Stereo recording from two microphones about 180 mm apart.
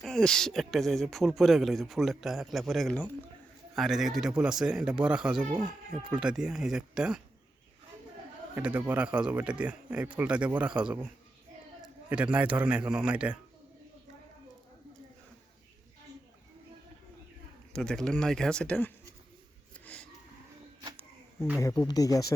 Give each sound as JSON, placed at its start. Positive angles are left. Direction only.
{"t": 0.0, "sound": "speech", "side_deg": 5}
{"t": 8.5, "sound": "speech", "side_deg": -10}
{"t": 17.7, "sound": "speech", "side_deg": 5}
{"t": 19.8, "sound": "a sound", "side_deg": 5}
{"t": 21.6, "sound": "speech", "side_deg": 20}